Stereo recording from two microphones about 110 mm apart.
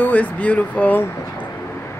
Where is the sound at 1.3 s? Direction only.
20° left (ahead or behind).